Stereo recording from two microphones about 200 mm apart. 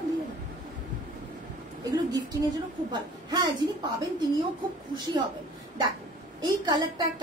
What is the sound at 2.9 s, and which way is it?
Speech, 20° right (ahead or behind).